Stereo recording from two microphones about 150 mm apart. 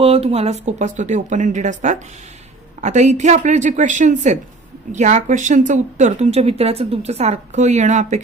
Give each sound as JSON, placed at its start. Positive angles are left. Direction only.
{"t": 0.0, "sound": "a woman's voice", "side_deg": -40}